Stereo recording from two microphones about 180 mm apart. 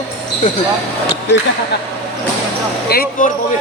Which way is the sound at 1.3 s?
75° left (ahead or behind).